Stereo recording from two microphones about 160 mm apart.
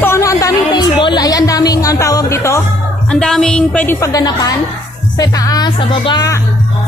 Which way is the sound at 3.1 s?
5° left (ahead or behind).